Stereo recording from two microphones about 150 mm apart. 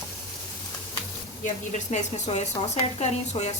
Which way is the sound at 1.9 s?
50° left (ahead or behind).